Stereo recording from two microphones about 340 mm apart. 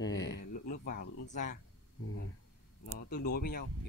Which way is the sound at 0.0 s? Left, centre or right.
Left.